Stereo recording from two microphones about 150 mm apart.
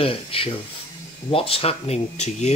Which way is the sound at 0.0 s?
40° left (ahead or behind).